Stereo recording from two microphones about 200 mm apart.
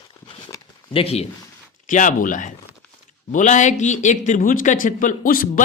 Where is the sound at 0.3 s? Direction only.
25° left (ahead or behind).